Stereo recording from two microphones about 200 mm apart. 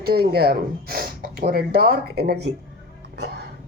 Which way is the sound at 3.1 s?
55° right (ahead or behind).